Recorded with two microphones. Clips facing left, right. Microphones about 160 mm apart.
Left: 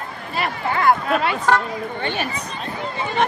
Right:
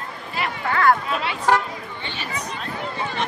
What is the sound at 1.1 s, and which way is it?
Speech, 50° left (ahead or behind).